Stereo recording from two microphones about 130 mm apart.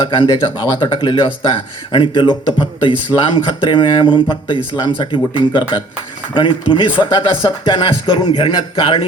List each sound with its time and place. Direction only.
0.0 s speech: 40° left (ahead or behind)